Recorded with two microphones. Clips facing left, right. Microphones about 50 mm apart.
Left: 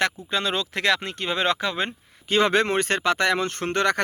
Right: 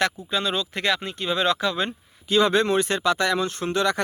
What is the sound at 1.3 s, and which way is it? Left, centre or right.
Speech, left.